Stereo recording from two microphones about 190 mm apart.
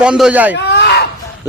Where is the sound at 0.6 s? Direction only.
60° left (ahead or behind).